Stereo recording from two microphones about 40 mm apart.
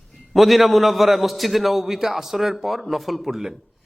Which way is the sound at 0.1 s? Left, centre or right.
Centre.